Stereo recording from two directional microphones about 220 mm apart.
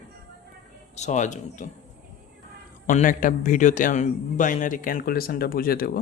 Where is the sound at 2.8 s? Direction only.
35° left (ahead or behind).